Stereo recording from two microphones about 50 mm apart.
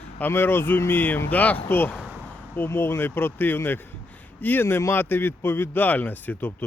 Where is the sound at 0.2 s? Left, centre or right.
Left.